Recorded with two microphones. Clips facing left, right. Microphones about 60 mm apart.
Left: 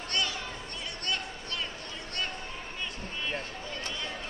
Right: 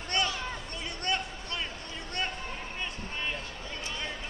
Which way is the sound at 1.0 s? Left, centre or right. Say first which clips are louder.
Right 3 dB; right.